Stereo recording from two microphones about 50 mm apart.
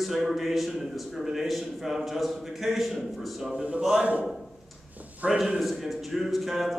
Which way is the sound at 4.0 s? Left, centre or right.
Right.